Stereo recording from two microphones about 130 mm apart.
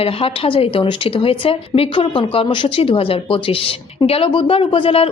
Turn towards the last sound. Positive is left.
turn(degrees=45)  # may be behind; listen again after turning